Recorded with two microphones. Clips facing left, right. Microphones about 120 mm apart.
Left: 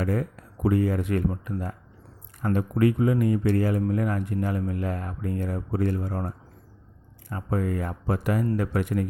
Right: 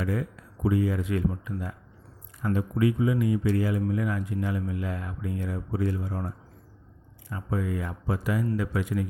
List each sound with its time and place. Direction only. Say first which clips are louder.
0.0 s speech: left 3 dB; 50° left (ahead or behind)